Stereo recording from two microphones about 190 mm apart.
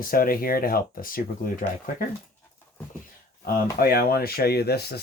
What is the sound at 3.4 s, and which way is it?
Speech, 50° left (ahead or behind).